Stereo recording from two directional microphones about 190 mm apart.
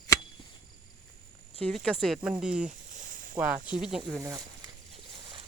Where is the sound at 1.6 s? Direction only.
Centre (ahead or behind).